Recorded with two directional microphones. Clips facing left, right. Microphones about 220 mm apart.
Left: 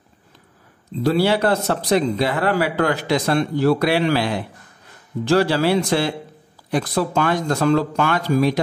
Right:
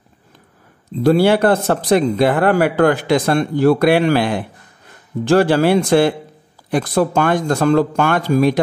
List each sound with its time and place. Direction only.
1.0 s speech: 50° right (ahead or behind)